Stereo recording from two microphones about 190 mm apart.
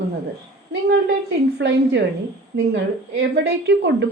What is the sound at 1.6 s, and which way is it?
Speech, 75° right (ahead or behind).